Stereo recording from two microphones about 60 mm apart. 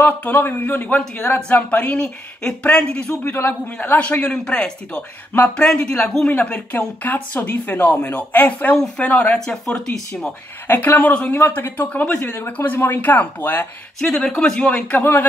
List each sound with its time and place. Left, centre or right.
0.0 s speech: left
3.3 s speech: left
8.7 s speech: centre
9.0 s speech: left
9.7 s speech: centre
10.7 s speech: left
13.9 s speech: centre
15.0 s speech: left